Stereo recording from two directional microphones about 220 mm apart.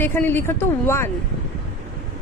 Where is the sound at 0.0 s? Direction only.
10° left (ahead or behind).